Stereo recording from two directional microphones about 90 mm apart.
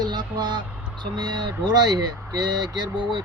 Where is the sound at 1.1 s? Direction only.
55° right (ahead or behind).